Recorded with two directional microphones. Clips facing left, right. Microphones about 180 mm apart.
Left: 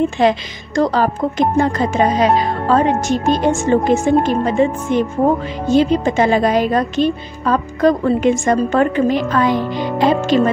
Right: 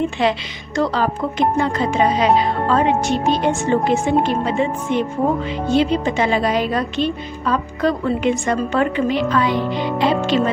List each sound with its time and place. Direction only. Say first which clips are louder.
0.2 s a woman's voice: left 4 dB; 45° left (ahead or behind)